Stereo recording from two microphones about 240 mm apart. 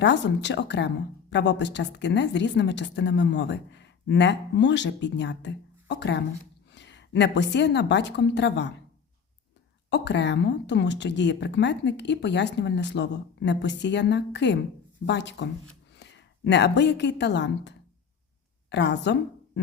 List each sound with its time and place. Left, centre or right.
0.0 s a woman's voice: left
9.9 s a woman's voice: left